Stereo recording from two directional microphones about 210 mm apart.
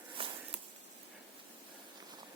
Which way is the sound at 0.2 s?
25° right (ahead or behind).